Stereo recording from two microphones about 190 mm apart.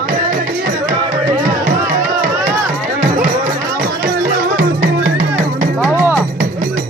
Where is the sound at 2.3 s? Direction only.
20° right (ahead or behind).